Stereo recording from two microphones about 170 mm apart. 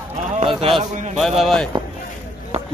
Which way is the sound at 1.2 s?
Centre (ahead or behind).